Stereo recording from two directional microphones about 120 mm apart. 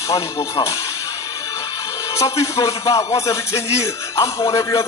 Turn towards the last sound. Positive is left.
turn(degrees=25)  # may be behind; listen again after turning